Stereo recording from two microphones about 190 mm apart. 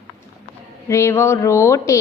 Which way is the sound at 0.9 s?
15° left (ahead or behind).